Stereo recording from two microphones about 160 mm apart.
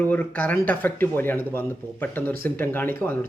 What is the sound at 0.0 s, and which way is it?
Speech, 10° left (ahead or behind).